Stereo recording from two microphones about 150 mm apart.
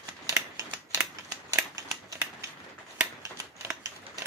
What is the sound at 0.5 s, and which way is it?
Scissors, 20° right (ahead or behind).